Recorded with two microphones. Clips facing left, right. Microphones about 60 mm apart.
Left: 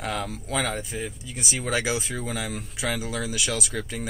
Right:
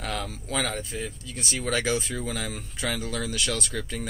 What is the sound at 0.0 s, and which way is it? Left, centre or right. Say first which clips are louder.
Speech: left 2 dB; centre.